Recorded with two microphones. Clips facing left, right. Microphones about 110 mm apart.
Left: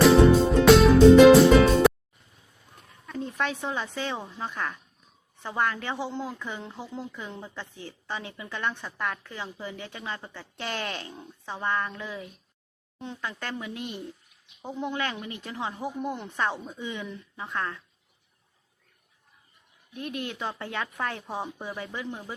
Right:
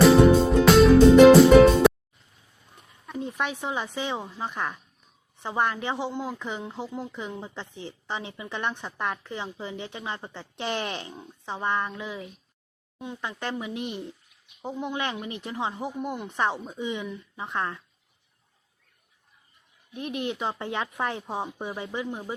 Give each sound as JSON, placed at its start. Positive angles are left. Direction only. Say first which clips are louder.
{"t": 0.0, "sound": "music", "louder": "right 1 dB", "side_deg": 0}
{"t": 3.1, "sound": "a woman's voice", "louder": "even", "side_deg": -15}
{"t": 19.9, "sound": "a woman's voice", "louder": "right 3 dB", "side_deg": -20}